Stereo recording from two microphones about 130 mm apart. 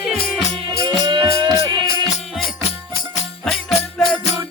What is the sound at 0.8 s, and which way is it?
Music, 35° right (ahead or behind).